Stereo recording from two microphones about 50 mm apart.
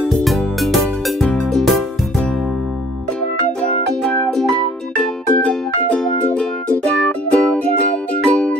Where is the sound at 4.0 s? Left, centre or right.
Left.